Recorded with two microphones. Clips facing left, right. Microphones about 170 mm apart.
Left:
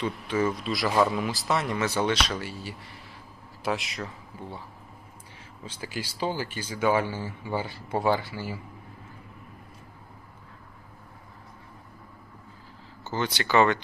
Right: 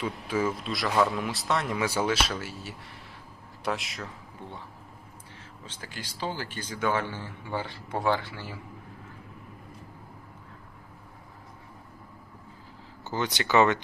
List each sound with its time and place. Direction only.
0.0 s a man's voice: 5° right (ahead or behind)
5.6 s speech: 10° left (ahead or behind)
13.1 s speech: 15° right (ahead or behind)